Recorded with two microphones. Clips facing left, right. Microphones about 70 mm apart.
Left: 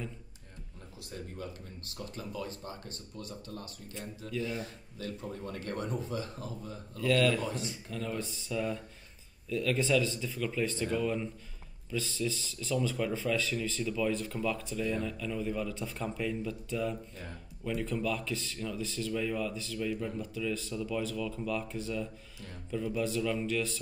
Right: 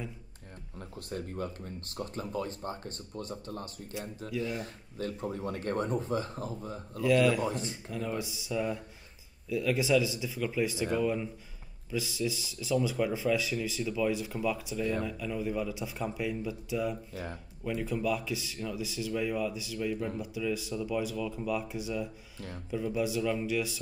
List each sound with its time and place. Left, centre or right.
0.7 s speech: right
7.0 s speech: centre
7.4 s speech: right
7.9 s speech: centre